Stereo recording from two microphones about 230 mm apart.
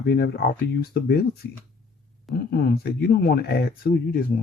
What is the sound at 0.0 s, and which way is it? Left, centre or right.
Speech, left.